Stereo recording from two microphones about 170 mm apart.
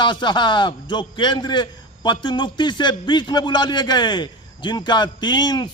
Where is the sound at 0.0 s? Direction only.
25° left (ahead or behind).